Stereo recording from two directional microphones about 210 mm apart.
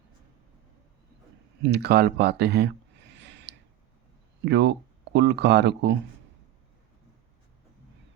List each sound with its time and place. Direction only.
1.6 s speech: 50° right (ahead or behind)
3.2 s gasp: 55° right (ahead or behind)
4.4 s speech: 55° right (ahead or behind)